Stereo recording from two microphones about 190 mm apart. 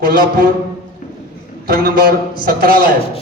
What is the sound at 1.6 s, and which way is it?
A man's voice, 50° right (ahead or behind).